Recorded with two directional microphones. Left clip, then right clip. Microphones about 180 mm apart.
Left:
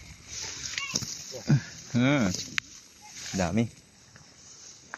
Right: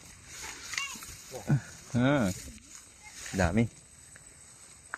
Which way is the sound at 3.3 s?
25° right (ahead or behind).